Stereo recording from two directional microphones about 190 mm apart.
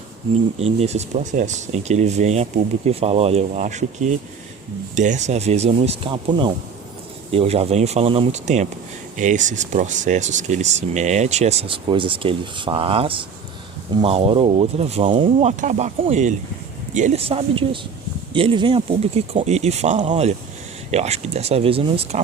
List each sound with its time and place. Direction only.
0.6 s speech: 35° right (ahead or behind)